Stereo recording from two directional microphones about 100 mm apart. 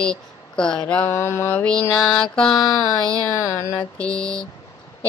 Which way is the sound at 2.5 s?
40° left (ahead or behind).